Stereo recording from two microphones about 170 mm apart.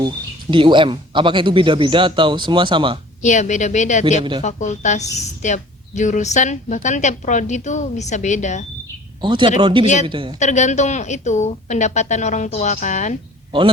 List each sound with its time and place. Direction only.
0.5 s speech: 30° right (ahead or behind)
3.2 s a woman's voice: 45° left (ahead or behind)
4.2 s speech: 30° right (ahead or behind)
4.4 s a woman's voice: 45° left (ahead or behind)
9.2 s speech: 30° right (ahead or behind)
9.8 s a woman's voice: 45° left (ahead or behind)
10.1 s speech: 30° right (ahead or behind)
10.4 s a woman's voice: 45° left (ahead or behind)